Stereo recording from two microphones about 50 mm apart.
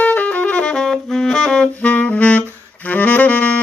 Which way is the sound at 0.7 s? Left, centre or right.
Centre.